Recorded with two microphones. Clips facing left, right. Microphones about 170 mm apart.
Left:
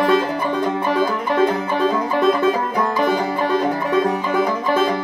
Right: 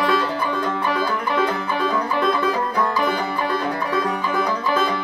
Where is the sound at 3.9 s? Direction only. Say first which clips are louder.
Left 4 dB; 25° left (ahead or behind).